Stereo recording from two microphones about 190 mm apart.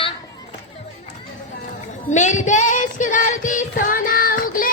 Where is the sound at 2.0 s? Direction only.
40° left (ahead or behind).